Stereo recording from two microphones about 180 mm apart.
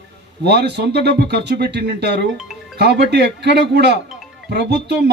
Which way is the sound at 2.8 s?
70° right (ahead or behind).